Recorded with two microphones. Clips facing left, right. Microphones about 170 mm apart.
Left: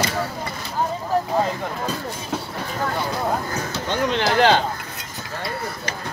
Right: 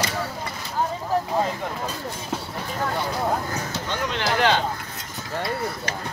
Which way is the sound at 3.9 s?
25° left (ahead or behind).